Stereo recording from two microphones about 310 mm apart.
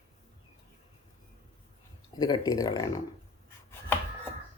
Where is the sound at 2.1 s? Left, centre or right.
Centre.